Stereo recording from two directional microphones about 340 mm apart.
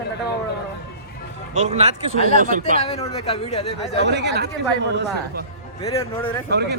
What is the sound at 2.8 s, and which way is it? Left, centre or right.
Speech, centre.